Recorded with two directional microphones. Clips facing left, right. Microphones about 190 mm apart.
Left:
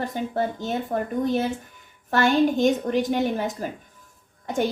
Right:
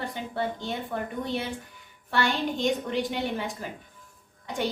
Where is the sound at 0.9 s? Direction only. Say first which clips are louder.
Left 9 dB; 45° left (ahead or behind).